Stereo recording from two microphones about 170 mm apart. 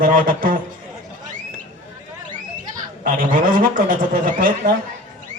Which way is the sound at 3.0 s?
55° right (ahead or behind).